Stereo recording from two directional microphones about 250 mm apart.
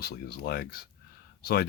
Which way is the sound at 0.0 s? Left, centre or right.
Left.